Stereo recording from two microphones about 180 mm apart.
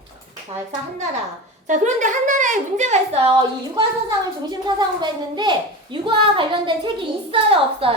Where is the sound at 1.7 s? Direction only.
45° right (ahead or behind).